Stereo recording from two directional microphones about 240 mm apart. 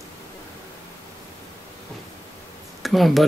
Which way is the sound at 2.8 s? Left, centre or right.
Centre.